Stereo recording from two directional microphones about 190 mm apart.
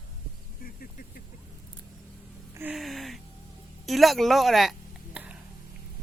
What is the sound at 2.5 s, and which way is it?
Music, 10° right (ahead or behind).